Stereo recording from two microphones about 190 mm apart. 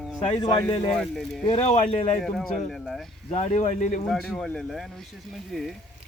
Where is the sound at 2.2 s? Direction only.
5° left (ahead or behind).